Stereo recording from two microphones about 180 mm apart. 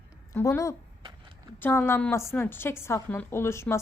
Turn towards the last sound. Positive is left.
turn(degrees=15)  # may be behind; listen again after turning